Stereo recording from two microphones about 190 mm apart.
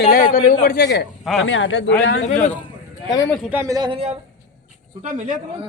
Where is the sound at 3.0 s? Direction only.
20° left (ahead or behind).